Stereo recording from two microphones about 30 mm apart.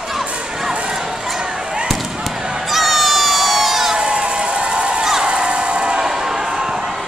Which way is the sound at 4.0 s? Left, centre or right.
Right.